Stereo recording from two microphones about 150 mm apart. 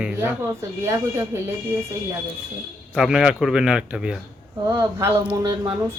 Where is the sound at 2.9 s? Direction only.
5° right (ahead or behind).